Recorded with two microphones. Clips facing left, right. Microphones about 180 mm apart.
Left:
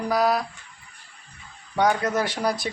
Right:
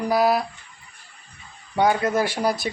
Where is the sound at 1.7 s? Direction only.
10° right (ahead or behind).